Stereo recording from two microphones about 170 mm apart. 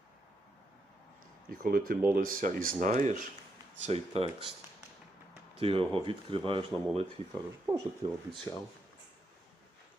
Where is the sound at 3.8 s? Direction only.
35° right (ahead or behind).